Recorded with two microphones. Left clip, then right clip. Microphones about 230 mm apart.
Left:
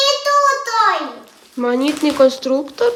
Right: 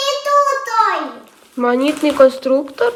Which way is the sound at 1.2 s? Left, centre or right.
Centre.